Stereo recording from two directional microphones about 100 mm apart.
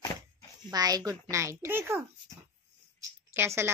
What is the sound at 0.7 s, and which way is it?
A woman's voice, 40° right (ahead or behind).